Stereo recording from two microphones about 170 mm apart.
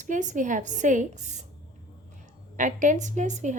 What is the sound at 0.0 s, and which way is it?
A woman's voice, 45° right (ahead or behind).